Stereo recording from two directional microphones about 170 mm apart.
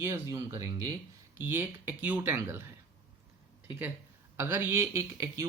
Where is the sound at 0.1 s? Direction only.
15° right (ahead or behind).